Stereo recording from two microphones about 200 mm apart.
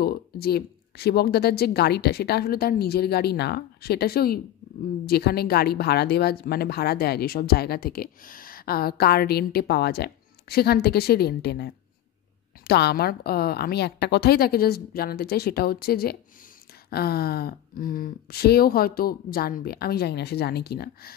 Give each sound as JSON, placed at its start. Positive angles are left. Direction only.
{"t": 0.0, "sound": "speech", "side_deg": 50}